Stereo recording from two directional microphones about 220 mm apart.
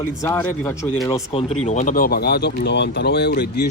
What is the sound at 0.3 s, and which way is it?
A man's voice, 10° left (ahead or behind).